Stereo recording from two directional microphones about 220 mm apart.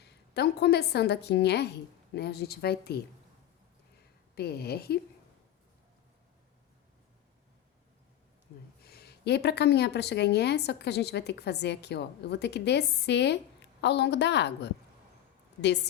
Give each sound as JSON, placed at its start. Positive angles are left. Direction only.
{"t": 0.0, "sound": "a woman's voice", "side_deg": 50}
{"t": 4.4, "sound": "speech", "side_deg": 45}
{"t": 8.8, "sound": "speech", "side_deg": 45}